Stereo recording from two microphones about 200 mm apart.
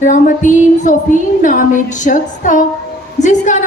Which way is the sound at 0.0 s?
40° left (ahead or behind).